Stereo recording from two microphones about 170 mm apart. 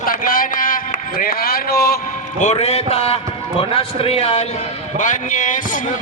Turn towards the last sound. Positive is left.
turn(degrees=50)  # may be behind; listen again after turning